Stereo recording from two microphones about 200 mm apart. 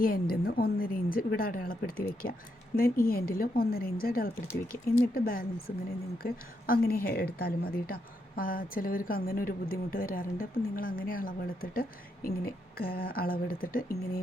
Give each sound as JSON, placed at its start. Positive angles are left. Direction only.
{"t": 0.0, "sound": "speech", "side_deg": 50}